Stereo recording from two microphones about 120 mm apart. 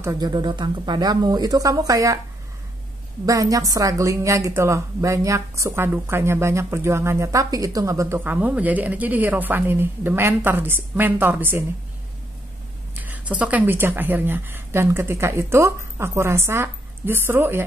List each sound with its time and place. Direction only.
0.0 s speech: 30° right (ahead or behind)
3.3 s a woman's voice: 30° right (ahead or behind)
8.2 s a woman's voice: 15° right (ahead or behind)
13.0 s a woman's voice: 15° right (ahead or behind)